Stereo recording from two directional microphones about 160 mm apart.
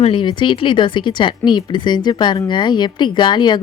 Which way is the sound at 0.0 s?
30° left (ahead or behind).